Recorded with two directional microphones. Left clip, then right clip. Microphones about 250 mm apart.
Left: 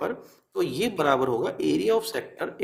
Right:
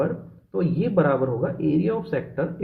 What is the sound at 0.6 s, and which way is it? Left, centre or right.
Speech, left.